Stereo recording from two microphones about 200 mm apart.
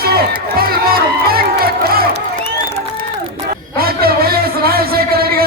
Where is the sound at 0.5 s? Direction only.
50° right (ahead or behind).